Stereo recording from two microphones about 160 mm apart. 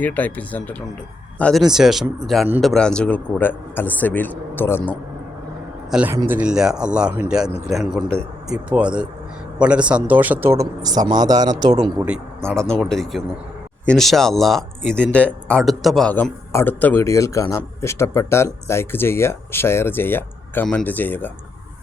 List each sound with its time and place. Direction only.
0.0 s speech: 10° left (ahead or behind)
5.9 s speech: 10° right (ahead or behind); by 11.7 s 25° right (ahead or behind)
12.5 s speech: 5° left (ahead or behind)